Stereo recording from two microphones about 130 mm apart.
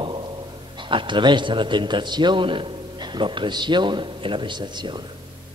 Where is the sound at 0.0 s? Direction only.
40° right (ahead or behind).